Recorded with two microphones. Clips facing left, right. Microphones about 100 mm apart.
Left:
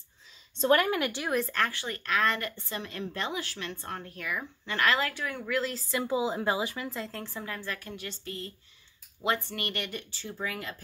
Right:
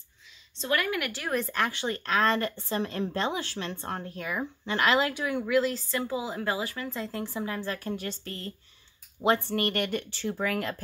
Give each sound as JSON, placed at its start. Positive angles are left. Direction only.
{"t": 0.6, "sound": "speech", "side_deg": 40}
{"t": 1.5, "sound": "speech", "side_deg": -15}
{"t": 6.0, "sound": "speech", "side_deg": 20}
{"t": 6.9, "sound": "speech", "side_deg": -5}
{"t": 9.2, "sound": "speech", "side_deg": -35}